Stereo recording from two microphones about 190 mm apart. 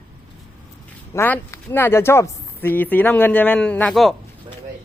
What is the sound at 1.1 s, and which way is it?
Speech, 10° left (ahead or behind).